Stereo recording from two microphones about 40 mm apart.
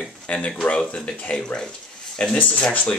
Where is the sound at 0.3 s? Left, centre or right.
Left.